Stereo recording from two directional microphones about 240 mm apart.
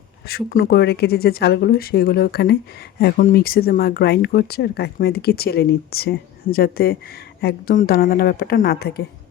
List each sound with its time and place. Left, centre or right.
0.3 s speech: left